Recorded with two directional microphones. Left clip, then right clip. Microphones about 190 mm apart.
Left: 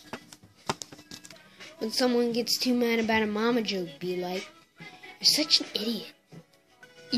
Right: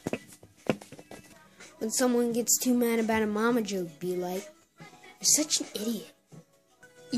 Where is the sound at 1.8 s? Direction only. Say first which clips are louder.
Left 1 dB; 15° right (ahead or behind).